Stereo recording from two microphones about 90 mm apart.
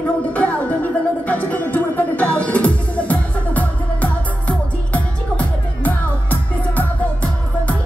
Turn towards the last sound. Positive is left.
turn(degrees=20)  # may be behind; listen again after turning